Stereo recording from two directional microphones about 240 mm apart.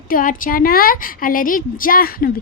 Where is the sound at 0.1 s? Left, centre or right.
Left.